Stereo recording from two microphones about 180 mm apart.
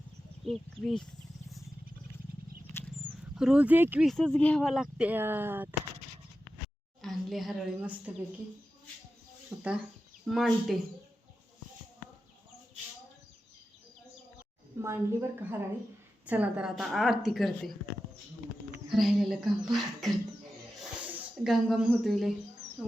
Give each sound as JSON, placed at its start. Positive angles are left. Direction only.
{"t": 0.4, "sound": "speech", "side_deg": 5}
{"t": 2.3, "sound": "wild animals", "side_deg": -55}
{"t": 3.3, "sound": "speech", "side_deg": -5}
{"t": 4.0, "sound": "speech", "side_deg": 0}
{"t": 7.0, "sound": "a woman's voice", "side_deg": 0}
{"t": 9.5, "sound": "speech", "side_deg": -5}
{"t": 14.8, "sound": "speech", "side_deg": -15}
{"t": 18.9, "sound": "speech", "side_deg": 0}